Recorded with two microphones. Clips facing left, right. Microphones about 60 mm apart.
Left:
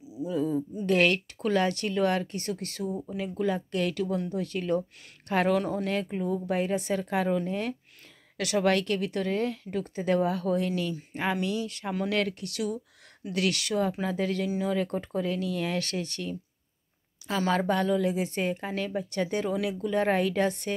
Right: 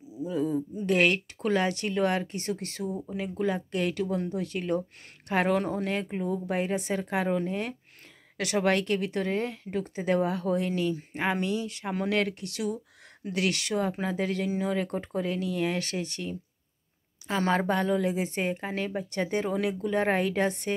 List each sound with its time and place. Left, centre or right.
0.3 s a sound: centre
0.8 s a woman's voice: centre
17.5 s a woman's voice: right